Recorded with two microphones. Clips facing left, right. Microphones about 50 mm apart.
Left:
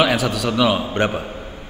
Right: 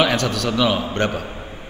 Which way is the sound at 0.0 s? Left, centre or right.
Centre.